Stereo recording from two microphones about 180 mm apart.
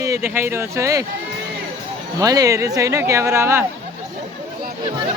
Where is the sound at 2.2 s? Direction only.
20° right (ahead or behind).